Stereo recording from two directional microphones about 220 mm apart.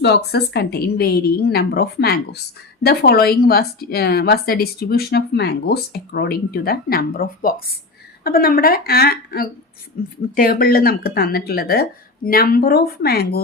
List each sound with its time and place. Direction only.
0.0 s a woman's voice: 50° left (ahead or behind)